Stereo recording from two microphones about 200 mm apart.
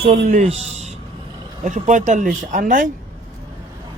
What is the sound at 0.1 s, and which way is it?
Speech, 35° right (ahead or behind).